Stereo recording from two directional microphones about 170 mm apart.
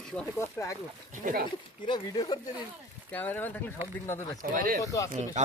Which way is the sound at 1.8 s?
25° left (ahead or behind).